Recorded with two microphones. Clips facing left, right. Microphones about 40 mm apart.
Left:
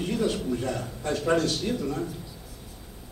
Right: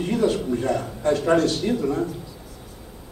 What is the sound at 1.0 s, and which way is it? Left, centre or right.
Speech, right.